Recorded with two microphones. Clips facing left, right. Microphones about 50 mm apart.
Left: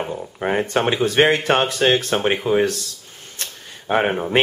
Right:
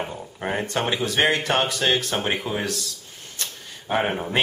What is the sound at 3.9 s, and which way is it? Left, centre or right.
Speech, centre.